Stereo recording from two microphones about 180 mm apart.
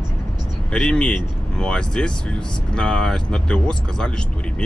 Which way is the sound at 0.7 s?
5° left (ahead or behind).